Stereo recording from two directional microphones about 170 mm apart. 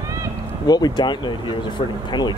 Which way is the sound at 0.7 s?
25° left (ahead or behind).